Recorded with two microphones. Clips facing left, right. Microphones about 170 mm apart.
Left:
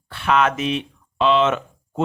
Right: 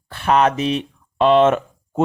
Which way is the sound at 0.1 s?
40° right (ahead or behind).